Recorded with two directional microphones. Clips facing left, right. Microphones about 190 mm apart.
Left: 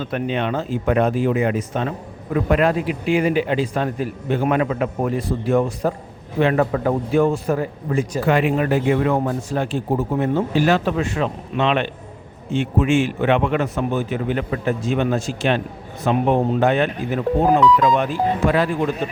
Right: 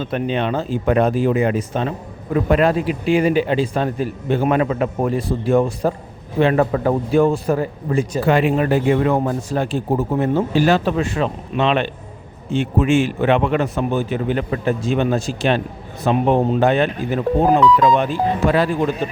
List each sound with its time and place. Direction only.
0.0 s speech: 30° right (ahead or behind)